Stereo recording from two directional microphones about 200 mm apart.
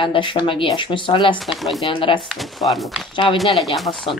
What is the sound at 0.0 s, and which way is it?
Speech, 25° left (ahead or behind).